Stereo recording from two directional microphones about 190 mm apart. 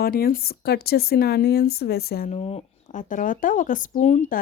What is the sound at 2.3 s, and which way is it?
Speech, 30° left (ahead or behind).